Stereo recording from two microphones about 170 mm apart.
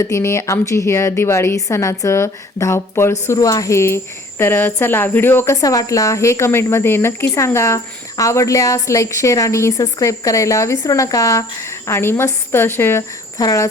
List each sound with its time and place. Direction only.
0.0 s a woman's voice: 15° left (ahead or behind)